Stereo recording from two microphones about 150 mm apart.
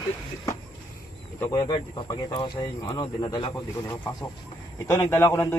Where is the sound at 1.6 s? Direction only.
30° left (ahead or behind).